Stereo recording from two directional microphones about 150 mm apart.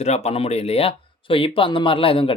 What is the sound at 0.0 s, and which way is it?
Speech, 45° left (ahead or behind).